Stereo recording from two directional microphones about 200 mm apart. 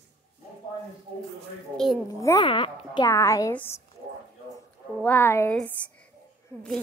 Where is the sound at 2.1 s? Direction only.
15° left (ahead or behind).